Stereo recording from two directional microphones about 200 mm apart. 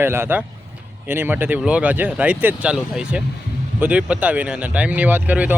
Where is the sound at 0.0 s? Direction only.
10° right (ahead or behind).